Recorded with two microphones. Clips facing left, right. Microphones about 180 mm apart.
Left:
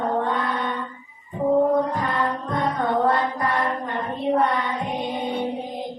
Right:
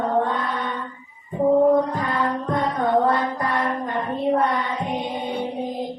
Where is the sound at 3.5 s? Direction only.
Centre (ahead or behind).